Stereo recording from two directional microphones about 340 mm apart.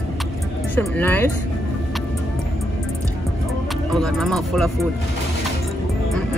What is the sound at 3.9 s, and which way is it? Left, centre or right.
Speech, centre.